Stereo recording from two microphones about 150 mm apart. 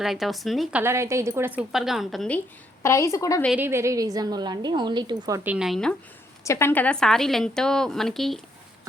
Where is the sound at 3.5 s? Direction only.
15° right (ahead or behind).